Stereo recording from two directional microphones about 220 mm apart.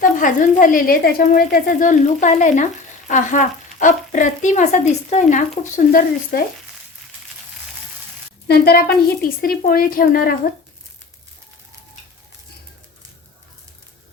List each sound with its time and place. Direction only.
0.0 s speech: 35° left (ahead or behind)
8.4 s speech: 45° left (ahead or behind)